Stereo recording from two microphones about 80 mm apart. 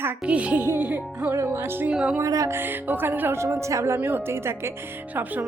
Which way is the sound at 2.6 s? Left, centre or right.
Right.